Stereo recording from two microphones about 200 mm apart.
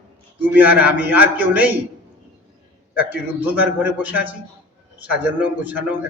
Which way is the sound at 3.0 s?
10° right (ahead or behind).